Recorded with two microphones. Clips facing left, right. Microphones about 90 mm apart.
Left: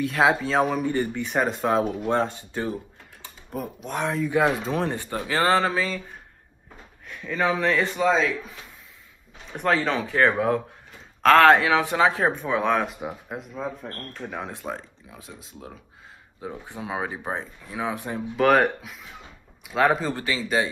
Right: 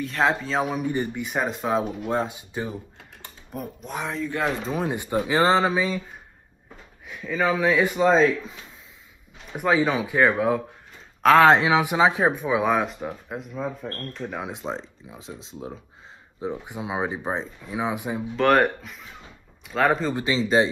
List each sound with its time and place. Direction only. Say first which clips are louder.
0.0 s speech: left 2 dB; 5° left (ahead or behind)
0.8 s speech: left 1 dB; 15° right (ahead or behind)
1.3 s speech: left 2 dB; centre (ahead or behind)
3.5 s speech: left 2 dB; centre (ahead or behind)
4.9 s speech: right 4 dB; 15° right (ahead or behind)
7.1 s speech: right 1 dB; 5° right (ahead or behind)
9.5 s speech: right 2 dB; 10° right (ahead or behind)
11.4 s speech: even; 20° right (ahead or behind)
12.9 s speech: right 1 dB; 5° left (ahead or behind)
14.5 s speech: right 2 dB; 20° right (ahead or behind)
18.3 s speech: even; centre (ahead or behind)
20.2 s speech: right 4 dB; 25° right (ahead or behind)